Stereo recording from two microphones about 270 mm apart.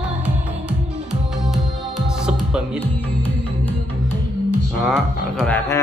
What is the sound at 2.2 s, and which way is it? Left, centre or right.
Music, centre.